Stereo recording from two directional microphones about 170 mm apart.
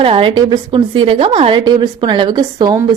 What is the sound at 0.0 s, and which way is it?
A woman's voice, 30° right (ahead or behind).